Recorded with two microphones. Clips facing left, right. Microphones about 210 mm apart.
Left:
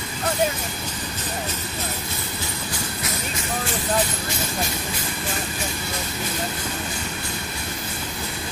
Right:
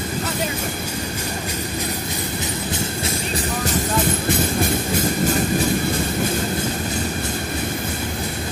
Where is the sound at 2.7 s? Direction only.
30° right (ahead or behind).